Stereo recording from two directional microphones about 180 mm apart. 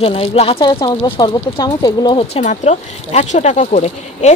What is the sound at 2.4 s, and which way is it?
Speech, 40° left (ahead or behind).